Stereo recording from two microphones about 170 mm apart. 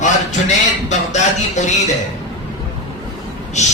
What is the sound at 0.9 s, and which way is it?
A man's voice, 45° left (ahead or behind).